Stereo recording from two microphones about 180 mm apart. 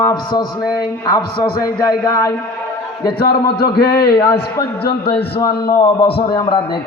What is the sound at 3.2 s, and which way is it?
Speech, 60° left (ahead or behind).